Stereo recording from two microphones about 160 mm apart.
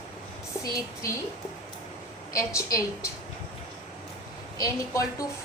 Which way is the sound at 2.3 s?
20° left (ahead or behind).